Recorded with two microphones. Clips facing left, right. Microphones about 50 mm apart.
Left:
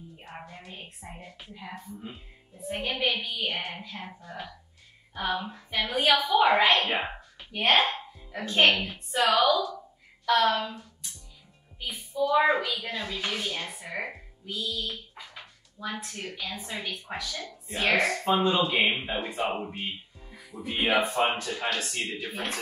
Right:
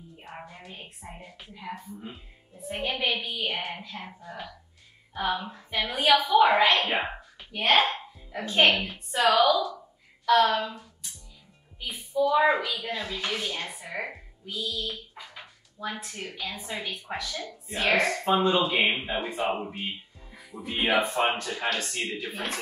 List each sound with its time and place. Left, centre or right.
0.2 s a woman's voice: centre